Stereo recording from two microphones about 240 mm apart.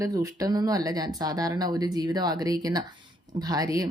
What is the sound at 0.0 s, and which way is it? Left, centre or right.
A woman's voice, centre.